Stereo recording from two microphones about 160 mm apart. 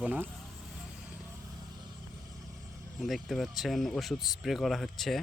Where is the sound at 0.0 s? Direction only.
5° right (ahead or behind).